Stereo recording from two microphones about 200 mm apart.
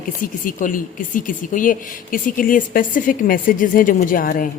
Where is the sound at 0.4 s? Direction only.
40° left (ahead or behind).